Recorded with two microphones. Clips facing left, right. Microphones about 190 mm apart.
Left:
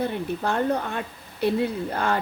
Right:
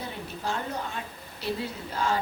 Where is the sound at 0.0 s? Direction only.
60° left (ahead or behind).